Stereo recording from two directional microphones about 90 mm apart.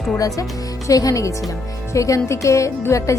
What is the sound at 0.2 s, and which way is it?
Speech, 40° left (ahead or behind).